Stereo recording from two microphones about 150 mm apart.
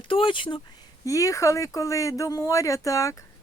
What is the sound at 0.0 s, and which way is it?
Speech, 35° left (ahead or behind).